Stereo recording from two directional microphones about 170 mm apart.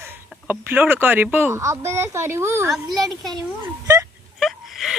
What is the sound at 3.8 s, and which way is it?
Wail, 20° right (ahead or behind).